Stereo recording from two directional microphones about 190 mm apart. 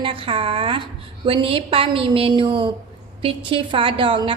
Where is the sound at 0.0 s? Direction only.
25° right (ahead or behind).